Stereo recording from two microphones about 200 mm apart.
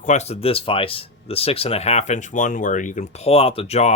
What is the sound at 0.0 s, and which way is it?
Speech, 35° left (ahead or behind).